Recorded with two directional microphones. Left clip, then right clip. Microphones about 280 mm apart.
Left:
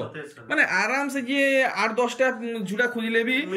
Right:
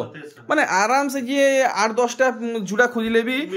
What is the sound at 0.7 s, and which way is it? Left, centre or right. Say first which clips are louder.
Speech: right 5 dB; centre.